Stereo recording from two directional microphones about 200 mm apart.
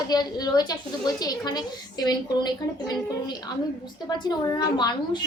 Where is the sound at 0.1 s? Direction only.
20° left (ahead or behind).